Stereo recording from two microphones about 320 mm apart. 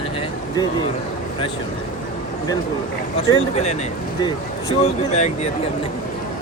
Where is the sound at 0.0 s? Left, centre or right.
Centre.